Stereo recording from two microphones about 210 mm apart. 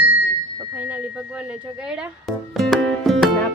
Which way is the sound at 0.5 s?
10° right (ahead or behind).